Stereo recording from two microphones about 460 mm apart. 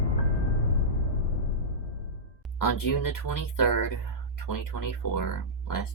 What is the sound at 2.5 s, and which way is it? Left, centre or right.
Speech, left.